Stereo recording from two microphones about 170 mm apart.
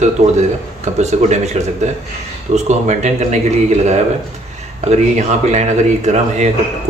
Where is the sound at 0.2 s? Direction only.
40° right (ahead or behind).